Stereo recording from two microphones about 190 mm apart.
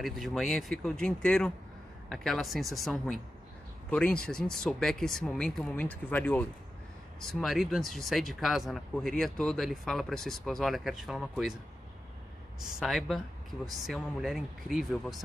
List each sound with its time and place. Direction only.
0.0 s speech: centre (ahead or behind)
12.6 s speech: centre (ahead or behind)